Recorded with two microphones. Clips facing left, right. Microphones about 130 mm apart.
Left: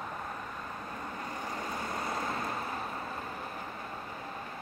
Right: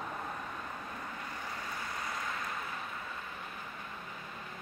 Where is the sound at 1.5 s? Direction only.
40° left (ahead or behind).